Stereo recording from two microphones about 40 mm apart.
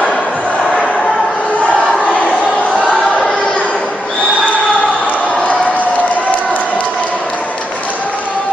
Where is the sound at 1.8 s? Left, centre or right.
Centre.